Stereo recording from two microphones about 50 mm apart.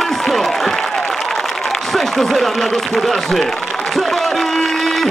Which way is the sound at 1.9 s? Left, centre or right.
Centre.